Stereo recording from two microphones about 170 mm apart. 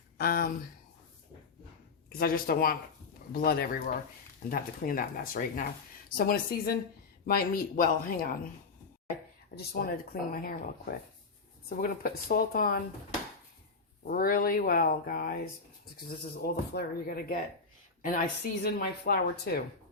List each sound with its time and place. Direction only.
0.2 s speech: 60° left (ahead or behind)
2.1 s speech: 60° left (ahead or behind)
9.6 s speech: 60° left (ahead or behind)
11.8 s speech: 60° left (ahead or behind)
14.0 s speech: 60° left (ahead or behind)
16.7 s speech: 60° left (ahead or behind)